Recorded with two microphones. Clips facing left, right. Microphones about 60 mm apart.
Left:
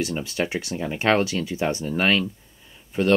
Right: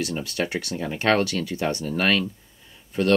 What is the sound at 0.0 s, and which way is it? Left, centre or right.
Speech, left.